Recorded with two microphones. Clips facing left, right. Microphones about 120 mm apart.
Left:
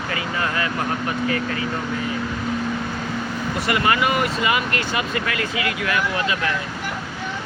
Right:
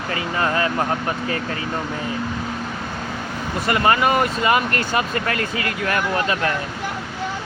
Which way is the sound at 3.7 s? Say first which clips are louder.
Right 3 dB; 35° right (ahead or behind).